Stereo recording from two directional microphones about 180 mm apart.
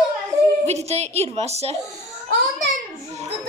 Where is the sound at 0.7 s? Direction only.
35° right (ahead or behind).